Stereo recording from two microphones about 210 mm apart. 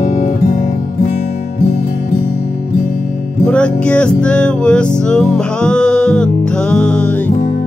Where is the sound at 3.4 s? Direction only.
5° left (ahead or behind).